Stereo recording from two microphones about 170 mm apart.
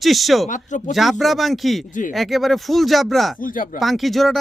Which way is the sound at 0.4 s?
45° left (ahead or behind).